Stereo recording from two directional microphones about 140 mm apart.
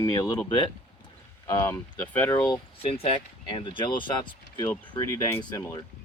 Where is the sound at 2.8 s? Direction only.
45° left (ahead or behind).